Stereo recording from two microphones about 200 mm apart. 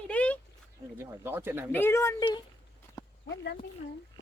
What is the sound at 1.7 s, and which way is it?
Speech, 10° left (ahead or behind).